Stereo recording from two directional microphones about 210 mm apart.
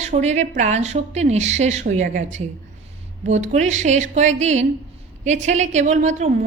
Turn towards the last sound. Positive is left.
turn(degrees=-35)  # may be behind; listen again after turning